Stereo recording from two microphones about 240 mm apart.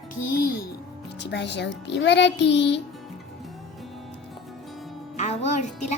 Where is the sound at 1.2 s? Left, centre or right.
Left.